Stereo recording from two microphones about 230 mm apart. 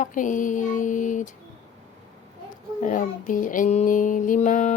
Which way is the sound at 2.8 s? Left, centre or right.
Left.